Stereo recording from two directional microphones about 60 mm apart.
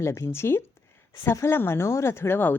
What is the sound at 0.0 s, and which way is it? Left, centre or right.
A woman's voice, left.